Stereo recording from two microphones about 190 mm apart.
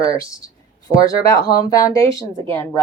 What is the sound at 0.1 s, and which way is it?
Speech, 15° left (ahead or behind).